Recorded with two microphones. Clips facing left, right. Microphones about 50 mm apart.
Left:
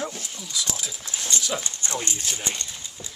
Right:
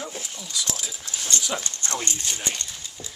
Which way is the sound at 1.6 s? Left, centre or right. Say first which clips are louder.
Even; centre.